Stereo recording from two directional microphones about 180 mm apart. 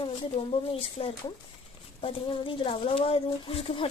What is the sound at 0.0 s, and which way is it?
Speech, 30° left (ahead or behind).